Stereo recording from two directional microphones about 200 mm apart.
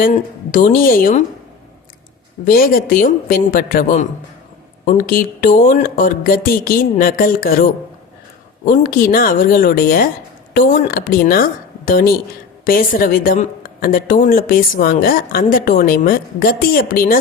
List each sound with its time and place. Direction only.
0.0 s speech: 40° left (ahead or behind)
2.5 s speech: 45° left (ahead or behind)